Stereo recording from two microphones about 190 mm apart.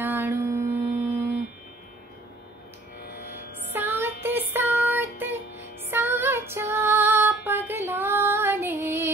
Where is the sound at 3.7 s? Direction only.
10° right (ahead or behind).